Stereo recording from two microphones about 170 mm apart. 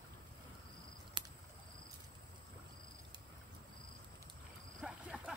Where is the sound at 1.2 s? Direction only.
30° right (ahead or behind).